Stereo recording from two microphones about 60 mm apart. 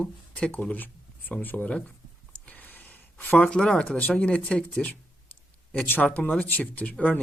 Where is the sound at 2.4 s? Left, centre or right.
Left.